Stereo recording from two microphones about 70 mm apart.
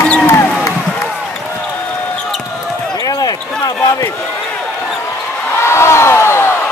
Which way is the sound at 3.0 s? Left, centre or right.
Left.